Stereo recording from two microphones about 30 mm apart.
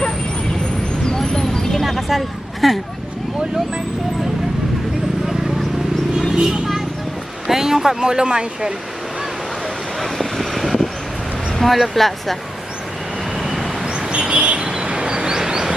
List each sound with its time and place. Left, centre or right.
1.0 s vehicle: left
1.7 s a sound: centre
2.0 s a sound: centre
2.6 s speech: centre
7.4 s boat: centre
8.0 s speech: right
10.0 s vehicle: centre
11.6 s speech: centre
13.4 s vehicle: centre
13.8 s bird: right
14.1 s bird: right
14.7 s vehicle: right